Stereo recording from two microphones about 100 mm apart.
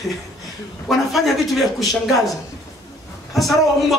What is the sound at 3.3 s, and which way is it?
Speech, centre (ahead or behind).